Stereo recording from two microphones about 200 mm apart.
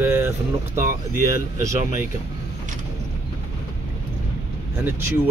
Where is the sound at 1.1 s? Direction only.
50° left (ahead or behind).